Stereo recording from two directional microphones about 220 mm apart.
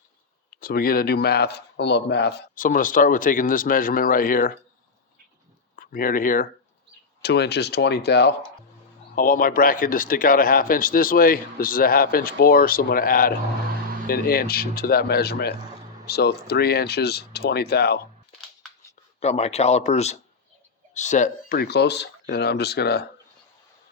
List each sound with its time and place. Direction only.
0.6 s speech: 40° left (ahead or behind)
5.7 s speech: 40° left (ahead or behind)
19.2 s speech: 30° left (ahead or behind); by 23.0 s 45° left (ahead or behind)